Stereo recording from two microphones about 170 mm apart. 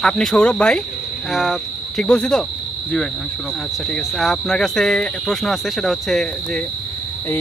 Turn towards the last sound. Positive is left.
turn(degrees=0)  # may be behind; listen again after turning